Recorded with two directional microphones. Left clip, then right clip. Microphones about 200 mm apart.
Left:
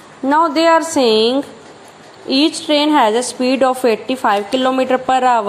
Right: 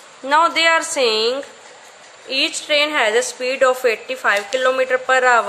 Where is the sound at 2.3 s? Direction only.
15° left (ahead or behind).